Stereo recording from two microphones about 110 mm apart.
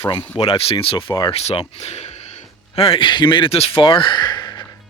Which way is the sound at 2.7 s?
55° left (ahead or behind).